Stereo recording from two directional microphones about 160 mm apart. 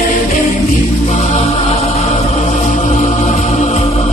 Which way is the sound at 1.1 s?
45° left (ahead or behind).